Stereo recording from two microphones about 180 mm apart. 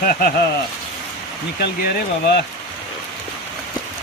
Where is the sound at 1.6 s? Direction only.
65° left (ahead or behind).